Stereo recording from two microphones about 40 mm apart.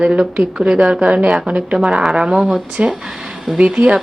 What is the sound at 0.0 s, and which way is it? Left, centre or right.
Speech, centre.